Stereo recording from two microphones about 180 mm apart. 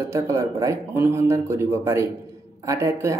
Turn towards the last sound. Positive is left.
turn(degrees=-15)  # may be behind; listen again after turning